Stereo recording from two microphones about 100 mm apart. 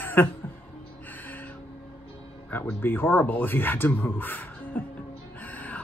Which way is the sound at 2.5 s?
20° left (ahead or behind).